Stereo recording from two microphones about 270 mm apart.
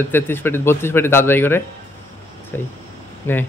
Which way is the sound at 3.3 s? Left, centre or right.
Centre.